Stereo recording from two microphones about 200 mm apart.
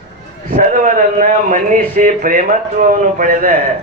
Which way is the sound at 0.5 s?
40° right (ahead or behind).